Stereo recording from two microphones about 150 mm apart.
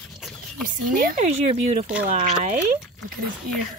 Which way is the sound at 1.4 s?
45° right (ahead or behind).